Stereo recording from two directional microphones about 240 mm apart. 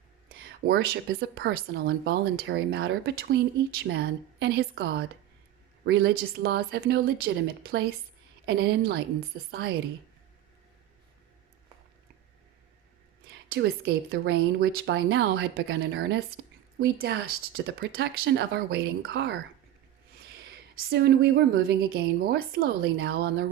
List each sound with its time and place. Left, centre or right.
0.3 s a sound: right
1.2 s speech: right
13.5 s speech: right
20.7 s speech: right